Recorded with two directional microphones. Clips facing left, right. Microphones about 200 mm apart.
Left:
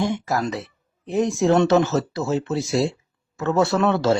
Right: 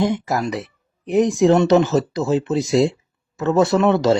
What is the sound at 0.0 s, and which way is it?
Speech, 20° right (ahead or behind).